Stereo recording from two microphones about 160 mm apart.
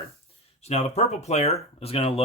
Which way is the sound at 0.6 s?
40° left (ahead or behind).